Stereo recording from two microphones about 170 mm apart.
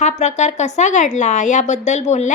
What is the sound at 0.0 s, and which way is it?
Speech, 45° left (ahead or behind).